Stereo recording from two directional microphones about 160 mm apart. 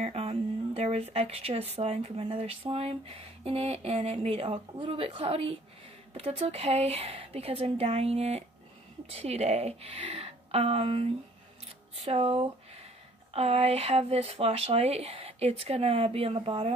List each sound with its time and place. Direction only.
0.0 s speech: 40° right (ahead or behind)